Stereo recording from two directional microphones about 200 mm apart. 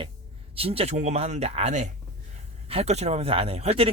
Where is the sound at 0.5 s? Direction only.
30° right (ahead or behind).